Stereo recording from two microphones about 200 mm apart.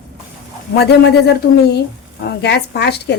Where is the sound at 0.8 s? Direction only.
55° left (ahead or behind).